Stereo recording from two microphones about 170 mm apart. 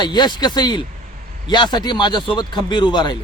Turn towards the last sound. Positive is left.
turn(degrees=25)  # may be behind; listen again after turning